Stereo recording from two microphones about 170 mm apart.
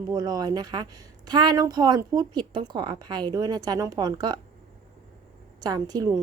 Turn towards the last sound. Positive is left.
turn(degrees=-20)  # may be behind; listen again after turning